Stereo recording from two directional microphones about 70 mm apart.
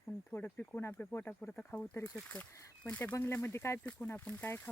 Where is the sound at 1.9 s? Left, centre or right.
Left.